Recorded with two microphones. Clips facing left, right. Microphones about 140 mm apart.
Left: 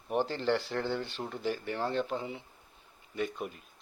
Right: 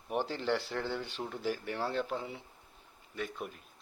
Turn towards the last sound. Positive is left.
turn(degrees=0)  # may be behind; listen again after turning